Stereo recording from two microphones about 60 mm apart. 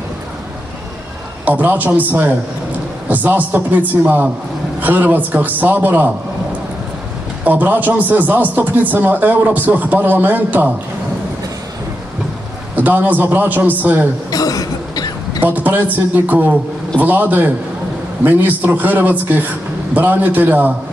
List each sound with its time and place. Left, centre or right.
1.4 s speech: right
7.4 s speech: right
12.7 s speech: right
14.3 s throat clearing: left
15.4 s speech: right